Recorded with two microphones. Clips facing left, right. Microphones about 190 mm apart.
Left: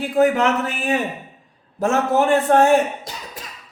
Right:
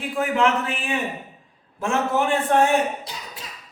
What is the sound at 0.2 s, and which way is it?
A man's voice, 40° left (ahead or behind).